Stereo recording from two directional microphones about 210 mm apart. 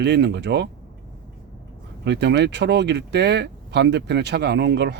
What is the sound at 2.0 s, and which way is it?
Speech, 55° right (ahead or behind).